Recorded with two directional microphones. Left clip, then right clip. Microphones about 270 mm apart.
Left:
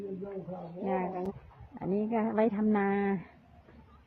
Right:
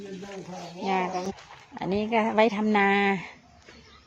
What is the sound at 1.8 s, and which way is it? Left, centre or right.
Speech, centre.